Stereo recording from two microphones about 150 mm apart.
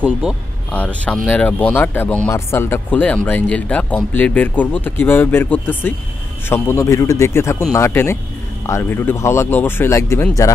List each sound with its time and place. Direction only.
0.7 s speech: 10° left (ahead or behind)